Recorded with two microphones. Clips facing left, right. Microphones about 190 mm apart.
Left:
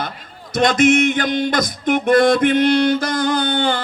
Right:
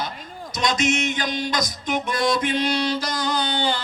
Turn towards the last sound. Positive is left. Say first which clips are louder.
# left 5 dB
turn(degrees=55)  # may be behind; listen again after turning